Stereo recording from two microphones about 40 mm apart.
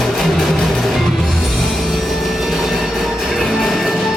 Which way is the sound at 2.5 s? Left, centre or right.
Centre.